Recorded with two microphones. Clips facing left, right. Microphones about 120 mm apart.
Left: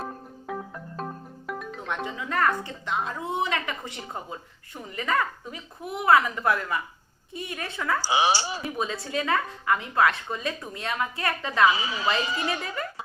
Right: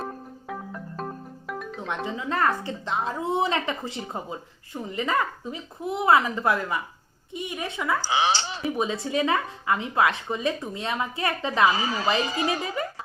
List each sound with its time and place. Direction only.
0.0 s music: centre (ahead or behind)
2.0 s a woman's voice: 25° right (ahead or behind)
8.0 s speech: 10° left (ahead or behind)
8.8 s a woman's voice: 20° right (ahead or behind)
11.7 s a woman's voice: 40° right (ahead or behind)